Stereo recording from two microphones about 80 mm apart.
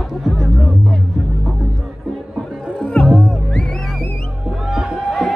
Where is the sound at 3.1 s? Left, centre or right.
Centre.